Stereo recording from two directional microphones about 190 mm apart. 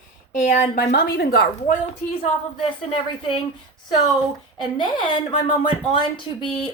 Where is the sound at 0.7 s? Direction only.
55° left (ahead or behind).